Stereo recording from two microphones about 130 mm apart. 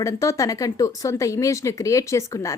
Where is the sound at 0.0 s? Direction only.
25° left (ahead or behind).